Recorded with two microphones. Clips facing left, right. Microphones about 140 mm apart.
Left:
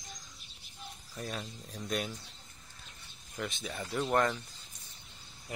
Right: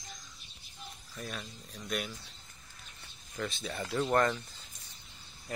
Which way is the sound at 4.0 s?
5° left (ahead or behind).